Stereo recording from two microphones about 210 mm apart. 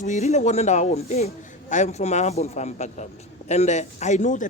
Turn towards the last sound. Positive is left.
turn(degrees=35)  # may be behind; listen again after turning